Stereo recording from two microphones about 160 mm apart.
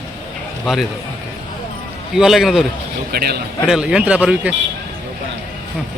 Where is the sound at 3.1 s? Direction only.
80° right.